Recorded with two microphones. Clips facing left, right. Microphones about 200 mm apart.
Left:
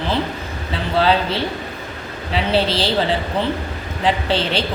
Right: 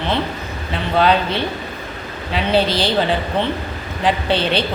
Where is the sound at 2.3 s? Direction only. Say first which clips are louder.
Right 1 dB; 30° left (ahead or behind).